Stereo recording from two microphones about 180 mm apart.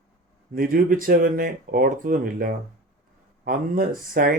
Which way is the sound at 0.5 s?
50° right (ahead or behind).